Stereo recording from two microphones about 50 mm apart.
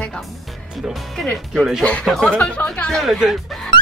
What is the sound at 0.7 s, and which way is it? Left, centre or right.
Speech, centre.